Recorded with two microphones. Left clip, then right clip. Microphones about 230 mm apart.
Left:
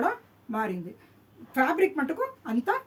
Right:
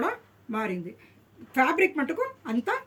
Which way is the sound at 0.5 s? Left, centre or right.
Centre.